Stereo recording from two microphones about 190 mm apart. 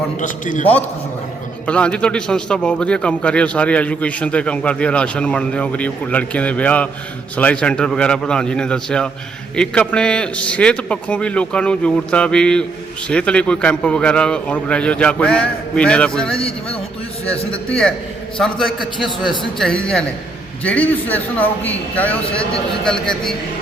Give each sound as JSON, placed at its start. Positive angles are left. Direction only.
{"t": 0.2, "sound": "a man's voice", "side_deg": 45}
{"t": 0.6, "sound": "a man's voice", "side_deg": 10}